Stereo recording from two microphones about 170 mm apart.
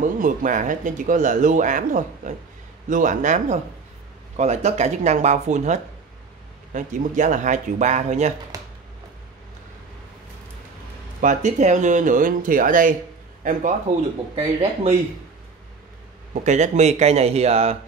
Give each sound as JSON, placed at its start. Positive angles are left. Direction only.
{"t": 0.0, "sound": "speech", "side_deg": -50}
{"t": 8.5, "sound": "a sound", "side_deg": -20}
{"t": 11.1, "sound": "a man's voice", "side_deg": -50}
{"t": 14.3, "sound": "speech", "side_deg": -35}
{"t": 16.4, "sound": "speech", "side_deg": -45}